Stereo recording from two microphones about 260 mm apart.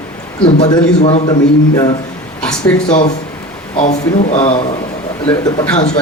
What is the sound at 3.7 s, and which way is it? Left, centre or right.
Speech, left.